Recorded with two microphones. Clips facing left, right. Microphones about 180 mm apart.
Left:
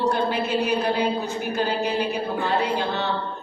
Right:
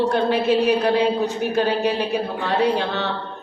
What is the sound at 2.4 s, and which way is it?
Speech, 70° right (ahead or behind).